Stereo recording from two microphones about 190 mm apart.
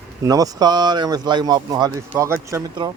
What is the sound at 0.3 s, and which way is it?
Speech, 20° right (ahead or behind).